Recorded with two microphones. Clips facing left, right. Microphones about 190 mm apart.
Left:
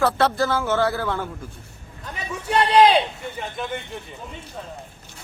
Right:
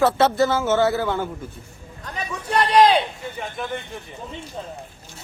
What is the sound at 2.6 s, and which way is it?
Speech, 30° left (ahead or behind).